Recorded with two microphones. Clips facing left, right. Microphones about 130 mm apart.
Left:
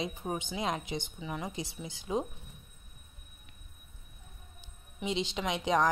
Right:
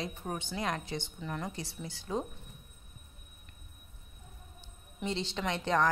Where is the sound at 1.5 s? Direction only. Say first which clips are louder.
Left 2 dB; 20° left (ahead or behind).